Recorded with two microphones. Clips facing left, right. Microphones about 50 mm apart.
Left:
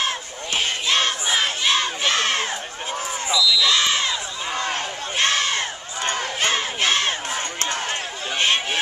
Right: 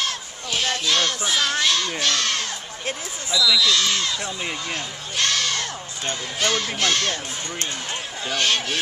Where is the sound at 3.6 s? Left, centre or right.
Left.